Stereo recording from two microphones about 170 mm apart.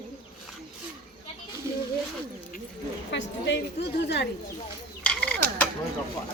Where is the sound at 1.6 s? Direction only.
15° right (ahead or behind).